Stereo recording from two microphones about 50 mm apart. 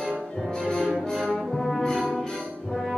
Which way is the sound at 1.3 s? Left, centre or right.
Centre.